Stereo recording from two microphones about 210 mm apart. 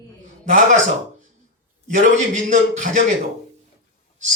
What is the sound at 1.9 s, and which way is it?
A man's voice, 35° right (ahead or behind).